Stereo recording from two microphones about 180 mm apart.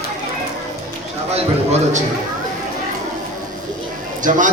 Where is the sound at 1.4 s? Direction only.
40° right (ahead or behind).